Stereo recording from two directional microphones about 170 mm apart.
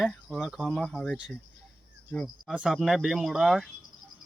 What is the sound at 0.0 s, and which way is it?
Speech, centre (ahead or behind).